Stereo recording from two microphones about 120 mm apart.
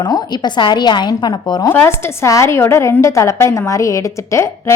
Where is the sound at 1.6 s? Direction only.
20° left (ahead or behind).